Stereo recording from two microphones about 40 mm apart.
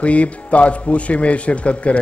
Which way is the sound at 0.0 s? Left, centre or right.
Left.